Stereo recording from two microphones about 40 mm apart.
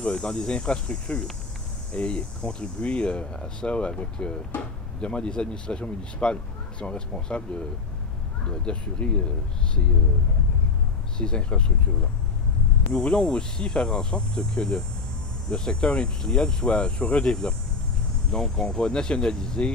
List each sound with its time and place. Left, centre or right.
0.0 s speech: left
11.1 s speech: left
12.9 s speech: left